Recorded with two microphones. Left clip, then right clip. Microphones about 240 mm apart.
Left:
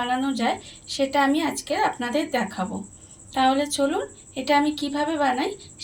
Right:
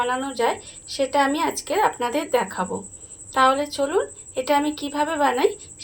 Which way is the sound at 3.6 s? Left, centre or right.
Right.